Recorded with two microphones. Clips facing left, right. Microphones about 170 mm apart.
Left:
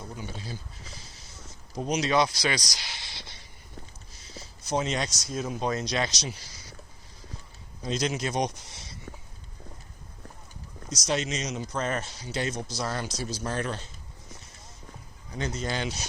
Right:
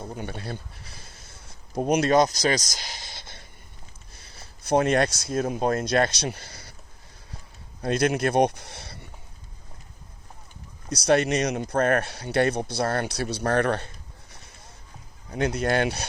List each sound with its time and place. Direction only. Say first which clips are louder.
0.2 s speech: right 5 dB; 60° right (ahead or behind)
7.8 s speech: right 6 dB; 60° right (ahead or behind)
10.8 s speech: right 8 dB; 60° right (ahead or behind)